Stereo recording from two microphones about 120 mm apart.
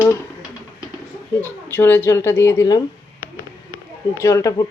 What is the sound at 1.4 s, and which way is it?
Speech, 15° left (ahead or behind).